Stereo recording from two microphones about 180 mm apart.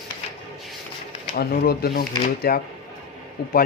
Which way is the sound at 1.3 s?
60° left (ahead or behind).